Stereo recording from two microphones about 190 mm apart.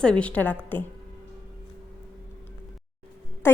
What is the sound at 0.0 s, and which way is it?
Speech, 5° left (ahead or behind).